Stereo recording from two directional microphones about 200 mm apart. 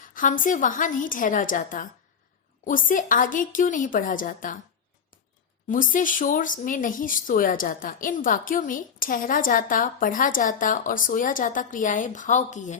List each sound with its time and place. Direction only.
0.1 s a woman's voice: 45° left (ahead or behind)
5.6 s speech: 40° left (ahead or behind)